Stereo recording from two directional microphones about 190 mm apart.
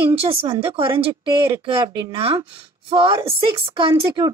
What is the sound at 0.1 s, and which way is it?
A woman's voice, 30° right (ahead or behind).